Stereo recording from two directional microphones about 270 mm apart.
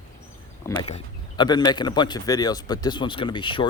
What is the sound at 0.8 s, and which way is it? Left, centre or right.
Speech, centre.